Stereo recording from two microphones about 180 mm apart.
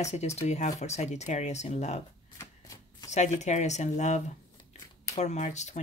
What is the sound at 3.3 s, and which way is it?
Speech, 40° left (ahead or behind).